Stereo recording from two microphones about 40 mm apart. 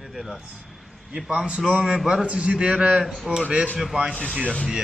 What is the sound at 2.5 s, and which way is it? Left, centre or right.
A man's voice, right.